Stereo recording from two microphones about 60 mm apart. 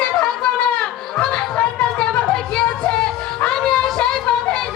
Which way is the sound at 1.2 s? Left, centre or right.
Centre.